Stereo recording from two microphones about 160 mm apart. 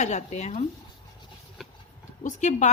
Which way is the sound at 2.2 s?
50° left (ahead or behind).